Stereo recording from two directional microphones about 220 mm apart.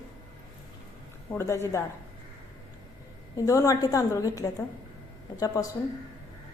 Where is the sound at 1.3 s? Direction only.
10° left (ahead or behind).